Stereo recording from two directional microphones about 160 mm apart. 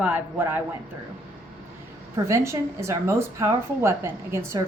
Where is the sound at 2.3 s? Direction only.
20° right (ahead or behind).